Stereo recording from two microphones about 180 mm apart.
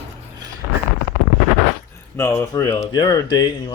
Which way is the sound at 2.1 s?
15° left (ahead or behind).